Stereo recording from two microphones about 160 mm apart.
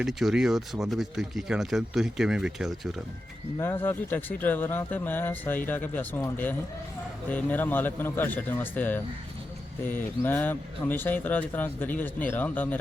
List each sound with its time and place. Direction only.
0.0 s speech: centre (ahead or behind)
3.6 s speech: 15° left (ahead or behind)